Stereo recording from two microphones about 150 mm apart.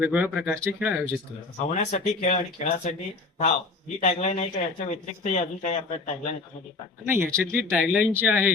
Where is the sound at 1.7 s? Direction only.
50° left (ahead or behind).